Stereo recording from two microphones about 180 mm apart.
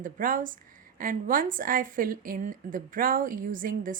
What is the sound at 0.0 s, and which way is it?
Speech, 50° right (ahead or behind).